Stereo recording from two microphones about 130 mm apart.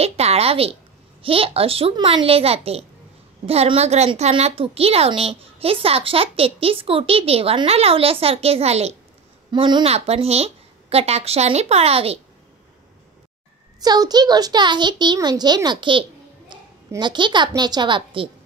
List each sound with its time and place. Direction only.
0.0 s a sound: 50° right (ahead or behind)
1.2 s a woman's voice: 45° right (ahead or behind)
9.5 s a child's voice: 35° right (ahead or behind)
9.8 s a woman's voice: 50° right (ahead or behind)
13.7 s a child's voice: 30° right (ahead or behind)